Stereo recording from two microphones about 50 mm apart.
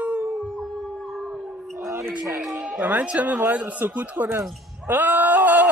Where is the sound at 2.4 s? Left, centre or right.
Centre.